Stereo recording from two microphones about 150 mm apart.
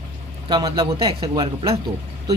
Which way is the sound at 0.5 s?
25° right (ahead or behind).